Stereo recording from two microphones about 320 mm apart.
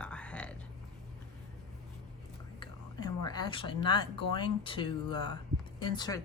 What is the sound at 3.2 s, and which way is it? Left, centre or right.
Speech, centre.